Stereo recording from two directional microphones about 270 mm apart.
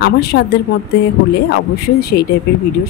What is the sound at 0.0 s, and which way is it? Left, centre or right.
Speech, left.